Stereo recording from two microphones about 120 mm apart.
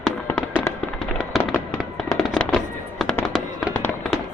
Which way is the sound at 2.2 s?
5° left (ahead or behind).